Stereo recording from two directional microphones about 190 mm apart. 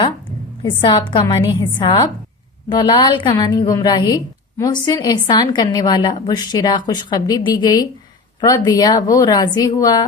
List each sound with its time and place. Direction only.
0.6 s a woman's voice: 25° left (ahead or behind)